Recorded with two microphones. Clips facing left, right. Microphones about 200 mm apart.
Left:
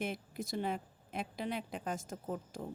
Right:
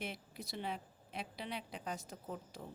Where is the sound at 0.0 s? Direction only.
50° left (ahead or behind).